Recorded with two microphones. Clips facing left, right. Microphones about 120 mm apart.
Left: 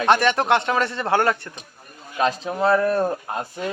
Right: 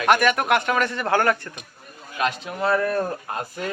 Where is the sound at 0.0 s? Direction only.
25° left (ahead or behind).